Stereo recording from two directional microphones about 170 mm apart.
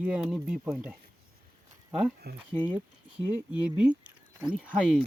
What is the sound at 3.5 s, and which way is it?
Speech, 5° right (ahead or behind).